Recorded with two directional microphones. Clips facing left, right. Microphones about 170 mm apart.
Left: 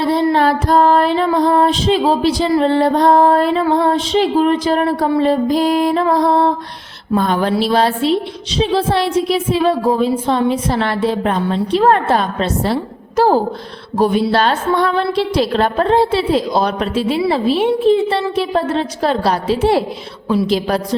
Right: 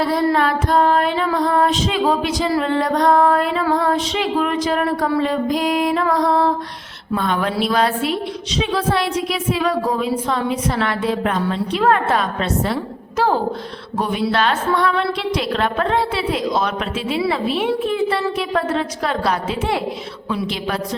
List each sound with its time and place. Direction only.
0.0 s female singing: 25° left (ahead or behind)